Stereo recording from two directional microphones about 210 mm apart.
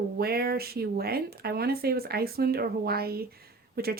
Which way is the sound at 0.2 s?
50° right (ahead or behind).